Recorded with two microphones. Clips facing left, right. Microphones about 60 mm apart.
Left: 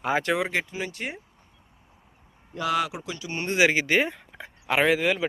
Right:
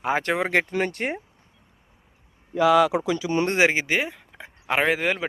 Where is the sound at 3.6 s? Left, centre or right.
Right.